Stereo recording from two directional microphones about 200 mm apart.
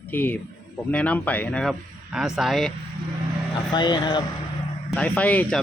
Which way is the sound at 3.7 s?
20° left (ahead or behind).